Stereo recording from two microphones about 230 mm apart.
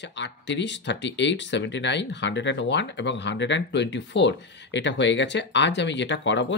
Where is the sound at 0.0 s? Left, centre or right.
Left.